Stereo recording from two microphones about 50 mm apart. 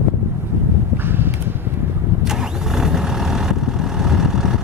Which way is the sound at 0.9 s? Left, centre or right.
Right.